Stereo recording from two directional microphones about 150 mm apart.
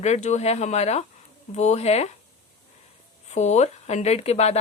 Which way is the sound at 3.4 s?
50° left (ahead or behind).